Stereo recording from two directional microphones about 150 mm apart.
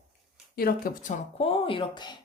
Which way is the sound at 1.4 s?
40° left (ahead or behind).